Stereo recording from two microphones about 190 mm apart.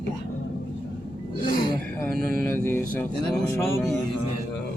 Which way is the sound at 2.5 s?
10° left (ahead or behind).